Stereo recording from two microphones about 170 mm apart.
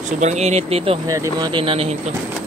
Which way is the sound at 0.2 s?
40° right (ahead or behind).